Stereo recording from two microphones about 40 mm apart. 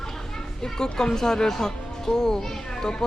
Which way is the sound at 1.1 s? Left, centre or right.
Centre.